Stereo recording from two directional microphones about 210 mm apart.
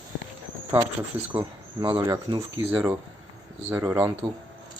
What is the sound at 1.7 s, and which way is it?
Speech, 25° right (ahead or behind).